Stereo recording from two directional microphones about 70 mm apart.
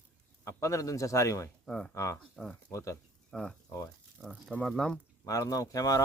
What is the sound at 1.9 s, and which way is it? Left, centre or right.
Speech, left.